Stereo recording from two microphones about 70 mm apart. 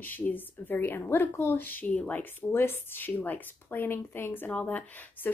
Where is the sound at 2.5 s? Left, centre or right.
Left.